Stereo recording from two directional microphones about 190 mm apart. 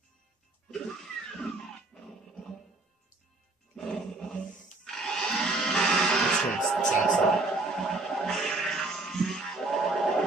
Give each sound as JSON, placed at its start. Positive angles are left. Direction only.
{"t": 1.9, "sound": "music", "side_deg": 5}
{"t": 3.7, "sound": "music", "side_deg": 5}
{"t": 4.5, "sound": "music", "side_deg": 40}
{"t": 4.8, "sound": "a sound", "side_deg": 0}